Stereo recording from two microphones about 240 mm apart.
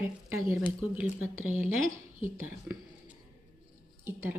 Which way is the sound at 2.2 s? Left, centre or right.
Centre.